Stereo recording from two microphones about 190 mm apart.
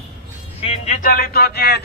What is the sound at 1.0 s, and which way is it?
Speech, 50° left (ahead or behind).